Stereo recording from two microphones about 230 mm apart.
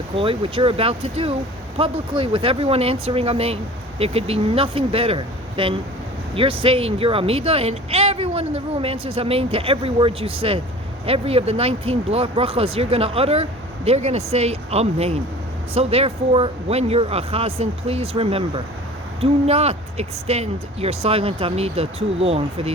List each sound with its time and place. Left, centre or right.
0.2 s speech: right